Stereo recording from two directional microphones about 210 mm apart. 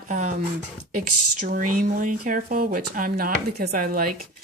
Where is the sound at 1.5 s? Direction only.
40° right (ahead or behind).